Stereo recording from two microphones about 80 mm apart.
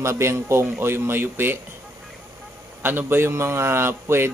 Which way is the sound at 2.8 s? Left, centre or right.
Right.